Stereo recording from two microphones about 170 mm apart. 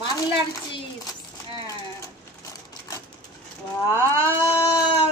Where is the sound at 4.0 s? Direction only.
20° right (ahead or behind).